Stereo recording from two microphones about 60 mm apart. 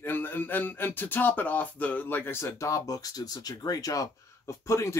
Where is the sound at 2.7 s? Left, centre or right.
Left.